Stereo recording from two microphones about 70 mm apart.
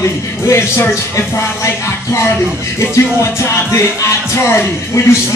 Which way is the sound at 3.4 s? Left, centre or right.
Left.